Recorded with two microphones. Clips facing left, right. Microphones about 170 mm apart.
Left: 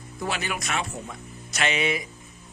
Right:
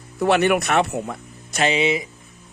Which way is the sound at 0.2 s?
65° right (ahead or behind).